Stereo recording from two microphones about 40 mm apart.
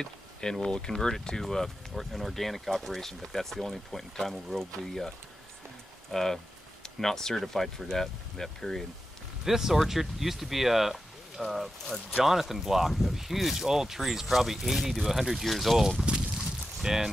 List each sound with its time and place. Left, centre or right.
0.0 s speech: centre
6.1 s speech: centre
9.4 s speech: centre
16.4 s a sound: centre